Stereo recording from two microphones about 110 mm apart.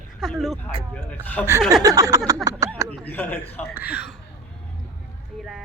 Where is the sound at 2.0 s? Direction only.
30° right (ahead or behind).